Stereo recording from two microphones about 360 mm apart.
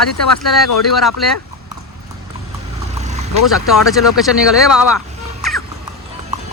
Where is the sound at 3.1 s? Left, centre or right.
Centre.